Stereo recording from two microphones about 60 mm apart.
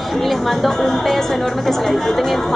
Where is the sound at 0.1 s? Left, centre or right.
Centre.